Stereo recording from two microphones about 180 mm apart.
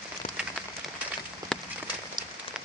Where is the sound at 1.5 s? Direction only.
5° left (ahead or behind).